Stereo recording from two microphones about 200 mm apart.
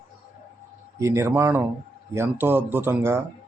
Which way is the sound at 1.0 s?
15° right (ahead or behind).